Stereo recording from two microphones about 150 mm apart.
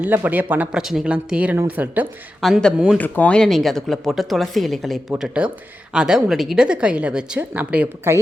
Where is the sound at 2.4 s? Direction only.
5° left (ahead or behind).